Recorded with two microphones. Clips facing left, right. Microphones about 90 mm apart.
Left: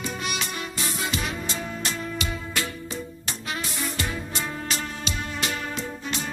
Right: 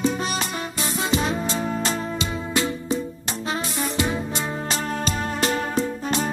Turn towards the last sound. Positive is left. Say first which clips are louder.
# right 8 dB
turn(degrees=-40)  # may be behind; listen again after turning